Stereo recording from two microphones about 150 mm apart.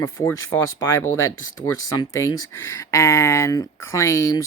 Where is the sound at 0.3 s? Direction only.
20° left (ahead or behind).